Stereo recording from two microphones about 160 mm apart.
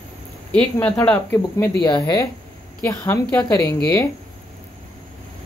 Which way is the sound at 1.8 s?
30° left (ahead or behind).